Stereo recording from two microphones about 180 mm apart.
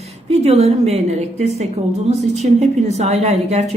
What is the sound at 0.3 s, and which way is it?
Speech, 35° right (ahead or behind).